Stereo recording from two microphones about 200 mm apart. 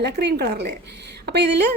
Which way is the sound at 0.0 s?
55° right (ahead or behind).